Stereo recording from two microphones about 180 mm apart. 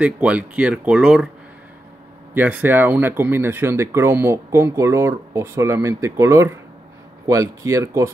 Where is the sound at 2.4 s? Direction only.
10° right (ahead or behind).